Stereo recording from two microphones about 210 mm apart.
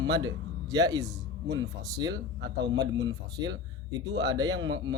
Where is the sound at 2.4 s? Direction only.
55° right (ahead or behind).